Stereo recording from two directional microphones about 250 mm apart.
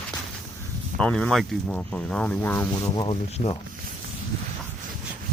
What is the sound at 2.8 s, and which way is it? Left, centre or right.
Speech, left.